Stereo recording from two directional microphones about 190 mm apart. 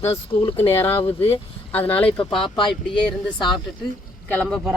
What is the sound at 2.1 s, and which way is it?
Speech, 25° left (ahead or behind).